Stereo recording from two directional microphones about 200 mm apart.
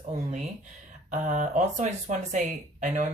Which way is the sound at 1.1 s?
40° right (ahead or behind).